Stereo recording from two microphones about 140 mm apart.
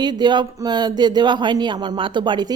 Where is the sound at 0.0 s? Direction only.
30° right (ahead or behind).